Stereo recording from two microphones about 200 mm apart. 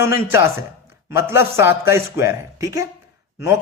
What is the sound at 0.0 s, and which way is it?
Speech, 15° right (ahead or behind).